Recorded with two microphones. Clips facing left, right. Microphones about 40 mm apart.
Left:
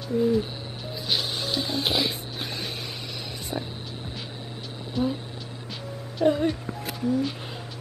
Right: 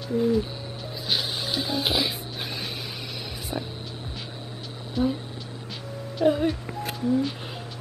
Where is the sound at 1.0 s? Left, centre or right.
Centre.